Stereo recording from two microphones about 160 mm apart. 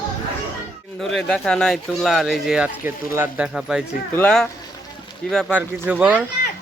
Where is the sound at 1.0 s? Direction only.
5° left (ahead or behind).